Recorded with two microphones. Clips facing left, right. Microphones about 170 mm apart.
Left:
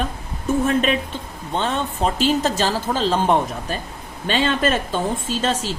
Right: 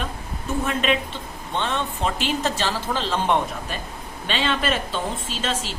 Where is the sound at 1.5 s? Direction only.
40° left (ahead or behind).